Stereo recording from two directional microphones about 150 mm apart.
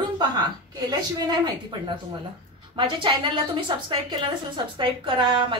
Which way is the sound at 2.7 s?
30° right (ahead or behind).